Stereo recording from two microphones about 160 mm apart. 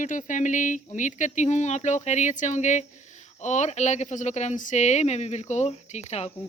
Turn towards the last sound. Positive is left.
turn(degrees=40)  # may be behind; listen again after turning